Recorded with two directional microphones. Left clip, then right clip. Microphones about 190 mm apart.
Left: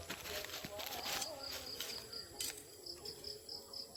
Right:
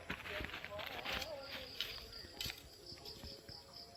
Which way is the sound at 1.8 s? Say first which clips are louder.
Right 4 dB; 15° left (ahead or behind).